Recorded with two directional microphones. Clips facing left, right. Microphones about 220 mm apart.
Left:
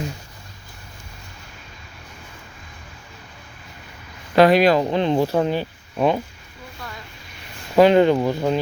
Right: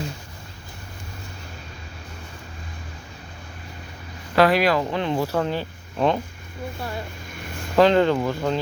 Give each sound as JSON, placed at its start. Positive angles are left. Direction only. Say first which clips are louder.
{"t": 4.4, "sound": "speech", "louder": "left 4 dB", "side_deg": 20}
{"t": 7.8, "sound": "speech", "louder": "left 3 dB", "side_deg": 15}